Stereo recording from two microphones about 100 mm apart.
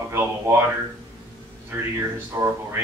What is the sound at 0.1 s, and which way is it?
Speech, 25° right (ahead or behind).